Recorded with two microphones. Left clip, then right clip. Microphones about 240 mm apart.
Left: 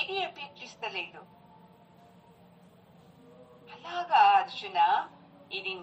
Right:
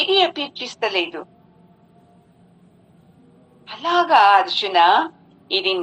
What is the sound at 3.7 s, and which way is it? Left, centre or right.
Speech, right.